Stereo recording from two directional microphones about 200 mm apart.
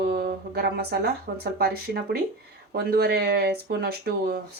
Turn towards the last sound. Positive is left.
turn(degrees=-50)  # may be behind; listen again after turning